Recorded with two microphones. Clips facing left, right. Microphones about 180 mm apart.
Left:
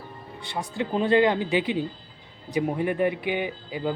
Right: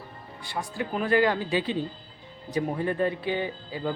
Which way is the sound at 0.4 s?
20° left (ahead or behind).